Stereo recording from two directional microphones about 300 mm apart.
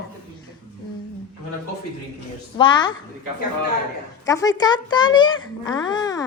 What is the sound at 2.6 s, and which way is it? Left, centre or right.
Speech, centre.